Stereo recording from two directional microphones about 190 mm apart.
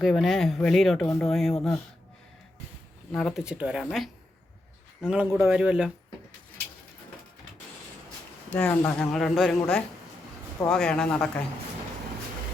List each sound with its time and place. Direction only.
0.0 s speech: centre (ahead or behind)
3.1 s speech: centre (ahead or behind)
8.5 s speech: 10° left (ahead or behind)